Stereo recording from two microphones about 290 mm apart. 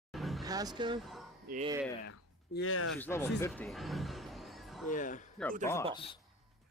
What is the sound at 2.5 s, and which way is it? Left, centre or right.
Speech, left.